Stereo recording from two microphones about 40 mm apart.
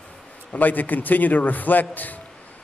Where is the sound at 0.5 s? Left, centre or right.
Left.